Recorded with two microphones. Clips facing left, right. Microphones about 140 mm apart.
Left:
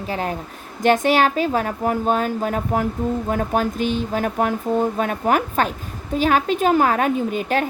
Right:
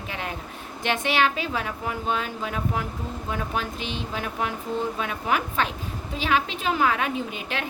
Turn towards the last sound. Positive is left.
turn(degrees=45)  # may be behind; listen again after turning